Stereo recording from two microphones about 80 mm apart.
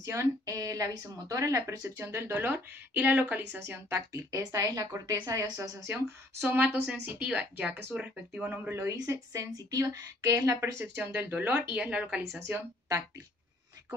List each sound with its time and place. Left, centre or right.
0.0 s a woman's voice: right
2.0 s speech: right
4.1 s a woman's voice: right
5.6 s a woman's voice: right
6.4 s speech: right
9.0 s a woman's voice: right
11.0 s speech: centre
12.2 s a woman's voice: right